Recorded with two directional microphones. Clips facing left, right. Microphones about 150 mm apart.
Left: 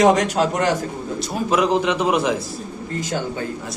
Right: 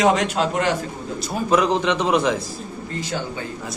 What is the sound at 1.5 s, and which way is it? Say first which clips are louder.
Speech: even; 5° left (ahead or behind).